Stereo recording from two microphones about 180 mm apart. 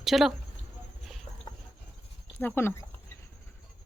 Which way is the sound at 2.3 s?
10° left (ahead or behind).